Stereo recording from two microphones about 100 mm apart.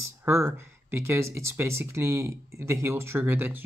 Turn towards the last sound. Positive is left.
turn(degrees=-20)  # may be behind; listen again after turning